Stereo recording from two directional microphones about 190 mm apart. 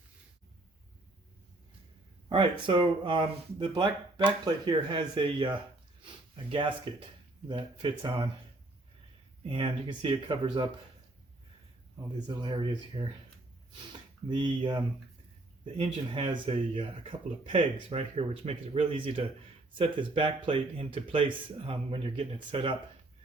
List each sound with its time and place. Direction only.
2.3 s speech: 25° right (ahead or behind)
7.4 s speech: 25° right (ahead or behind)
9.5 s speech: 30° right (ahead or behind)
12.4 s speech: 25° right (ahead or behind)
14.3 s speech: 25° right (ahead or behind)